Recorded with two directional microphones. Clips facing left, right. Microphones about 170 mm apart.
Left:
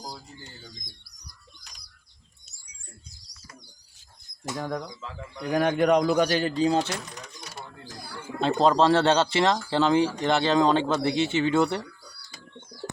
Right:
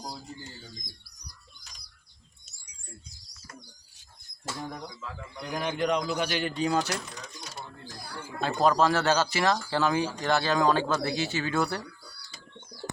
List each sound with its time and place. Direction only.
4.5 s speech: 20° left (ahead or behind)
5.5 s speech: 60° left (ahead or behind)
6.0 s a man's voice: 40° left (ahead or behind)
6.6 s speech: 30° left (ahead or behind)
8.4 s speech: 25° left (ahead or behind)